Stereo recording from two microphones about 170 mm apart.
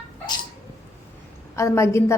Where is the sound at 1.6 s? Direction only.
15° left (ahead or behind).